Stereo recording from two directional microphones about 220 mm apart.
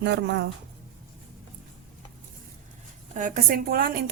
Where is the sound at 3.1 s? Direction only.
35° right (ahead or behind).